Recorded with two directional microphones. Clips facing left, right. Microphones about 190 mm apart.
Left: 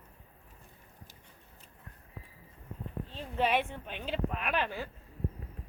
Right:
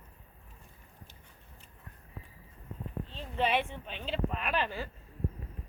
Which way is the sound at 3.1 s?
10° left (ahead or behind).